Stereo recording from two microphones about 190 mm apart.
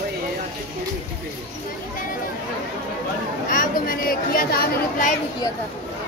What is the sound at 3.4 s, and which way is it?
Speech, 45° left (ahead or behind).